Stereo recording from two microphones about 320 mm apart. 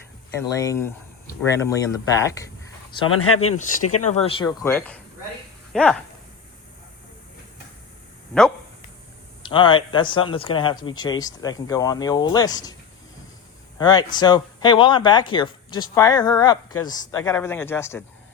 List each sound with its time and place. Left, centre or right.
0.3 s speech: centre
3.2 s speech: left
4.0 s speech: centre
8.3 s speech: centre
9.4 s speech: centre
13.7 s speech: centre